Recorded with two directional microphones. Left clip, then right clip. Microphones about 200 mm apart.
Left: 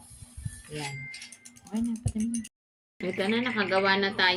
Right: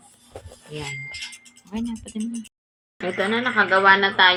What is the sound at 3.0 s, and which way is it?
Speech, 20° left (ahead or behind).